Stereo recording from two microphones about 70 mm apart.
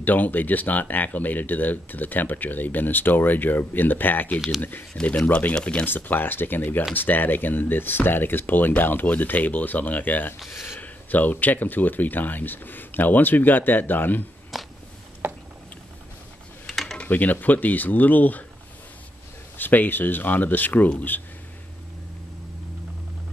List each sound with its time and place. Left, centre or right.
0.0 s speech: left
5.9 s speech: left
10.5 s speech: left
10.8 s speech: left
14.5 s a sound: centre
15.2 s a sound: right
16.6 s mechanisms: centre
17.0 s speech: left
19.6 s speech: left